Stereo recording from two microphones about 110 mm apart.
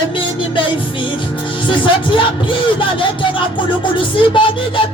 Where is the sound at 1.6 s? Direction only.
50° left (ahead or behind).